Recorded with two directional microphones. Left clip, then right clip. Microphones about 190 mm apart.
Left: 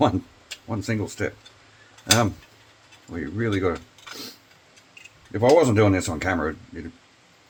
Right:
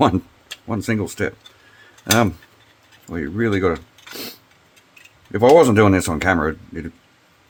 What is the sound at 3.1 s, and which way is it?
Speech, 50° right (ahead or behind).